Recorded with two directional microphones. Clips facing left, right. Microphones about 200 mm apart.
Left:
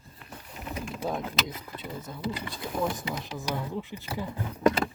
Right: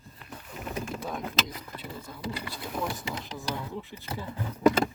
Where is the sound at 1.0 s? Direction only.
25° left (ahead or behind).